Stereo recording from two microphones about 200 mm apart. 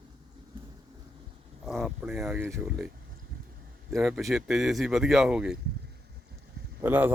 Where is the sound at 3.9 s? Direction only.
Centre (ahead or behind).